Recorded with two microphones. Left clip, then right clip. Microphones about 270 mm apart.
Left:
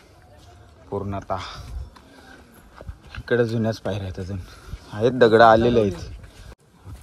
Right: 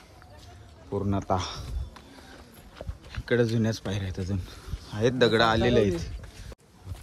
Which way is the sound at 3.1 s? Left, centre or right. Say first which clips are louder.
Left 4 dB; centre.